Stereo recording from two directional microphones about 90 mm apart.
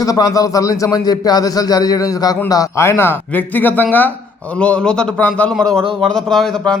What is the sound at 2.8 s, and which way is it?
Speech, 30° left (ahead or behind).